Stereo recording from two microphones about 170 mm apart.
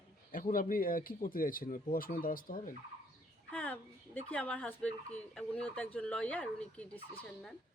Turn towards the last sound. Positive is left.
turn(degrees=10)  # may be behind; listen again after turning